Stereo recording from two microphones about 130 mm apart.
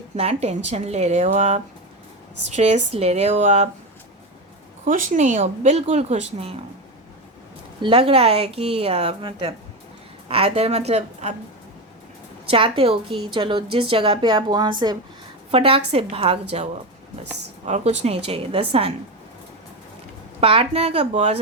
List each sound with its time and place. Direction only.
0.2 s speech: 55° right (ahead or behind)
4.9 s speech: 75° right (ahead or behind); by 6.5 s 60° right (ahead or behind)
7.8 s a woman's voice: 45° right (ahead or behind); by 11.3 s 60° right (ahead or behind)
12.5 s a woman's voice: 45° right (ahead or behind)
15.5 s a woman's voice: 45° right (ahead or behind)
17.7 s a woman's voice: 55° right (ahead or behind)
20.4 s a woman's voice: 45° right (ahead or behind)